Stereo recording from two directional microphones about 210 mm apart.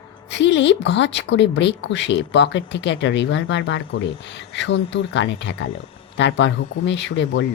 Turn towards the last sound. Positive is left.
turn(degrees=60)  # may be behind; listen again after turning